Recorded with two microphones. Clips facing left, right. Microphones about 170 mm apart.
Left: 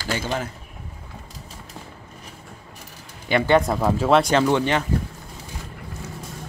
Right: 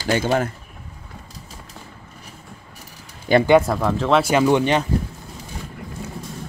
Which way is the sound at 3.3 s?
40° right (ahead or behind).